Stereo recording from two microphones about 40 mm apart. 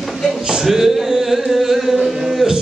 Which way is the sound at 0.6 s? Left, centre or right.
Centre.